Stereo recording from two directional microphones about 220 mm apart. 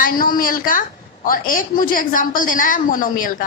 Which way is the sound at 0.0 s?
40° left (ahead or behind).